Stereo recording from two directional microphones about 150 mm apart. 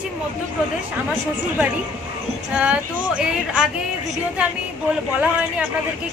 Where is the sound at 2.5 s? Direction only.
5° right (ahead or behind).